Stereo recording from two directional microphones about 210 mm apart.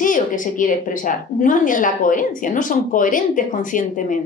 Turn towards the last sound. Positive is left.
turn(degrees=40)  # may be behind; listen again after turning